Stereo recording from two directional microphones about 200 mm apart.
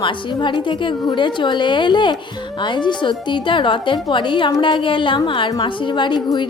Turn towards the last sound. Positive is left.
turn(degrees=20)  # may be behind; listen again after turning